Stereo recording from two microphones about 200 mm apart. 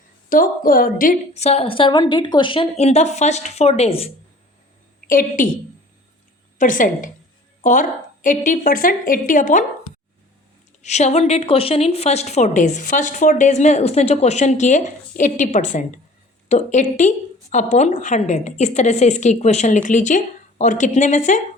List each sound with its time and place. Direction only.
0.3 s a woman's voice: 45° left (ahead or behind); by 4.1 s 30° left (ahead or behind)
4.9 s a woman's voice: 45° left (ahead or behind)
6.6 s a woman's voice: 40° left (ahead or behind)
10.8 s a woman's voice: 35° left (ahead or behind)